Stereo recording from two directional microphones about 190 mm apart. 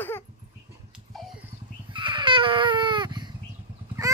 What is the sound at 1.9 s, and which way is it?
Baby cry, 25° right (ahead or behind).